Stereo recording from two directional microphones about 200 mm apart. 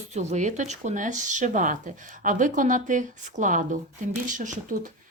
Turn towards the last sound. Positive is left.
turn(degrees=-40)  # may be behind; listen again after turning